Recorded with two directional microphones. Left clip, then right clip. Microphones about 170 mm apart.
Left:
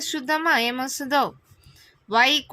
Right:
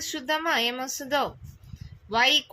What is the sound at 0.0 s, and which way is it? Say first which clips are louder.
Speech: left 4 dB; 50° left (ahead or behind).